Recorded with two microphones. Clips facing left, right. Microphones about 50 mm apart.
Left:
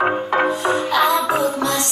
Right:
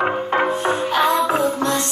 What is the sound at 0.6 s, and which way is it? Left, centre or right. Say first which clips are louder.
Music: left 1 dB; right.